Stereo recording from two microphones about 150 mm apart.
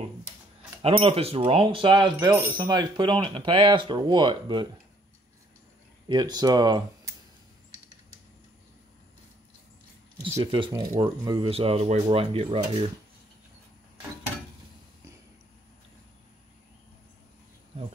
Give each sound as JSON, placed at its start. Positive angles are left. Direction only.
{"t": 0.8, "sound": "speech", "side_deg": -40}
{"t": 2.1, "sound": "speech", "side_deg": -15}
{"t": 6.0, "sound": "speech", "side_deg": -30}
{"t": 10.4, "sound": "speech", "side_deg": -35}